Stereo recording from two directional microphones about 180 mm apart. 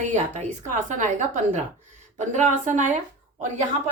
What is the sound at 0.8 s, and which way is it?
A woman's voice, 45° right (ahead or behind).